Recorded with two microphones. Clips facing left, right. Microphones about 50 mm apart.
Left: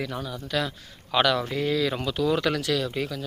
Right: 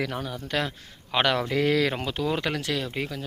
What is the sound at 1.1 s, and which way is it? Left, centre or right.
Speech, right.